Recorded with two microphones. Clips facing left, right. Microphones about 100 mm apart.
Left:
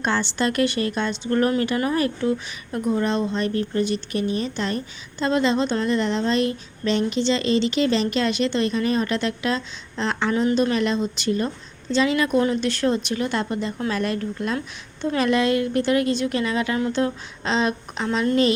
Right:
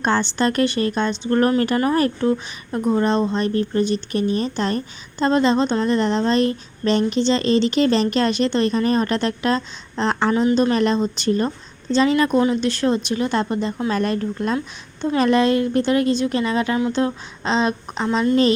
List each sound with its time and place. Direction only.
0.0 s speech: 30° right (ahead or behind)
12.6 s a woman's voice: 20° right (ahead or behind)